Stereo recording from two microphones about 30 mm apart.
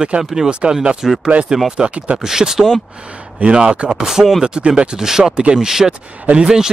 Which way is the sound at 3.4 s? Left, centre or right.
Right.